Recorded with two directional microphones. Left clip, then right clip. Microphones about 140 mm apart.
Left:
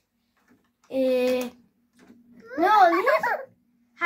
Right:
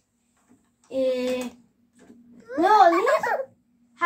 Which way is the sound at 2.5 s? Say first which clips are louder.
Right 1 dB; 55° right (ahead or behind).